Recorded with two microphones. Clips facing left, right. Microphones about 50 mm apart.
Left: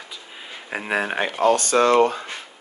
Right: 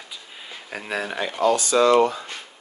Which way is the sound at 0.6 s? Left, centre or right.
Left.